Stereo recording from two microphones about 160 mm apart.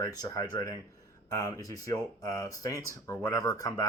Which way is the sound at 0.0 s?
20° left (ahead or behind).